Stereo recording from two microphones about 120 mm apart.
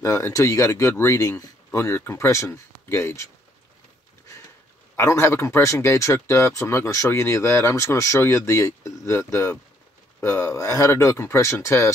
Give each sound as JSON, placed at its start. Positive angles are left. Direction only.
{"t": 0.0, "sound": "speech", "side_deg": 25}
{"t": 4.9, "sound": "speech", "side_deg": 25}